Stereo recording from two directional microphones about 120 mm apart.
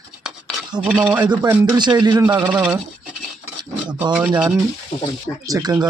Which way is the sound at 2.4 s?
10° right (ahead or behind).